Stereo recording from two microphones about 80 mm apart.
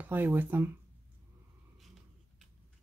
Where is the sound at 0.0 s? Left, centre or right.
Right.